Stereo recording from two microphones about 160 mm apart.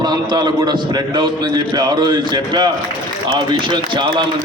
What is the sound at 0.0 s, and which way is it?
A man's voice, 25° right (ahead or behind).